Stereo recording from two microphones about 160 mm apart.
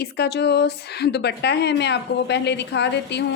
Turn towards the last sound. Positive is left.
turn(degrees=90)